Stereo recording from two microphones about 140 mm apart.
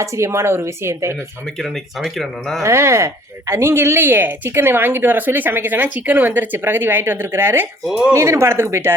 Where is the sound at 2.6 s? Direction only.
20° right (ahead or behind).